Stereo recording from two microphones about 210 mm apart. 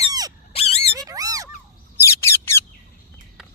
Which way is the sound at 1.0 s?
15° right (ahead or behind).